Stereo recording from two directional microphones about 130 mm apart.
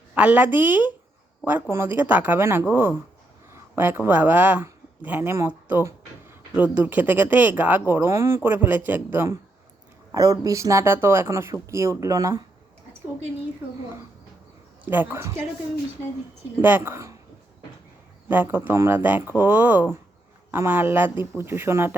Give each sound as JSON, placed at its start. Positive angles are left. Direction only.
{"t": 0.1, "sound": "speech", "side_deg": -10}
{"t": 14.8, "sound": "speech", "side_deg": -15}
{"t": 16.6, "sound": "speech", "side_deg": -15}
{"t": 18.3, "sound": "speech", "side_deg": -15}